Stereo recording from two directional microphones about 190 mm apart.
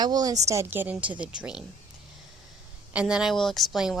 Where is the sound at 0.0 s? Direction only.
20° right (ahead or behind); by 1.6 s 5° right (ahead or behind).